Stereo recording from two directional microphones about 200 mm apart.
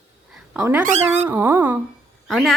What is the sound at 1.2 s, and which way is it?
Speech, 10° right (ahead or behind).